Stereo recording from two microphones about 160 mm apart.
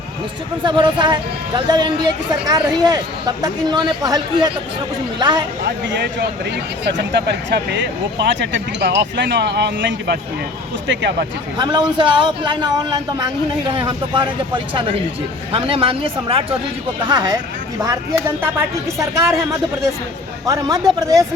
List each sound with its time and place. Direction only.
0.6 s speech: 30° right (ahead or behind)
5.6 s speech: 90° right
11.5 s speech: 25° right (ahead or behind)
17.1 s speech: 25° right (ahead or behind)